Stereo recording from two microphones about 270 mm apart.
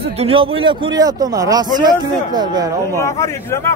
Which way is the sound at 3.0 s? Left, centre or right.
Centre.